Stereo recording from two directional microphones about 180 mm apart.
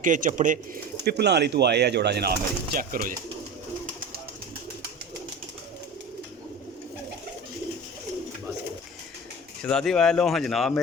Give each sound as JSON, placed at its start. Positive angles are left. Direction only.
{"t": 0.0, "sound": "speech", "side_deg": -45}
{"t": 1.0, "sound": "speech", "side_deg": -65}
{"t": 9.6, "sound": "speech", "side_deg": 5}